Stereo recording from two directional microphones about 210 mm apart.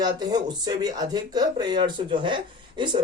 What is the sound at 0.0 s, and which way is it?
Speech, 20° right (ahead or behind).